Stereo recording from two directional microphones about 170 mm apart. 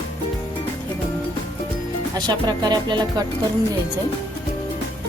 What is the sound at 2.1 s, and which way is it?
Speech, 25° right (ahead or behind).